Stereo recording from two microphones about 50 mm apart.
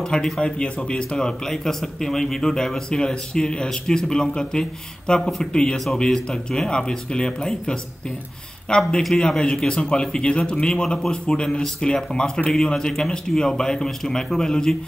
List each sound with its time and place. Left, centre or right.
0.0 s speech: centre